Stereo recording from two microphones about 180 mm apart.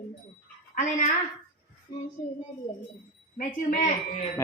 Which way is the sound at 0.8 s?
45° left (ahead or behind).